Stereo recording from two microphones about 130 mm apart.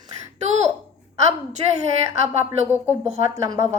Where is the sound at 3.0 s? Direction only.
60° right (ahead or behind).